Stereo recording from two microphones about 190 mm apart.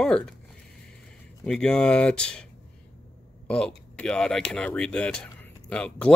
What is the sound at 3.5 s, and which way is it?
Speech, 5° left (ahead or behind).